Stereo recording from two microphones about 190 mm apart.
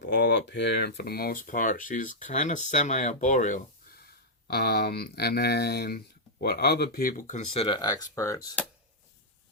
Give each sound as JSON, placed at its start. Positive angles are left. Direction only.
{"t": 0.0, "sound": "speech", "side_deg": 65}
{"t": 4.4, "sound": "speech", "side_deg": 55}